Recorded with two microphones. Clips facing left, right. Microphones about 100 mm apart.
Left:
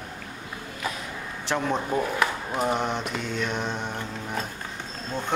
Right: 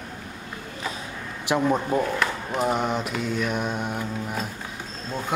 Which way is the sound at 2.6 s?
5° right (ahead or behind).